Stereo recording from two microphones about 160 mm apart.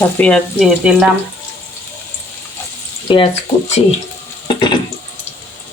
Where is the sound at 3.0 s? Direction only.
30° left (ahead or behind).